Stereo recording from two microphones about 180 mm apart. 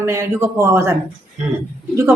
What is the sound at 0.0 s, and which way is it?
Speech, 15° right (ahead or behind).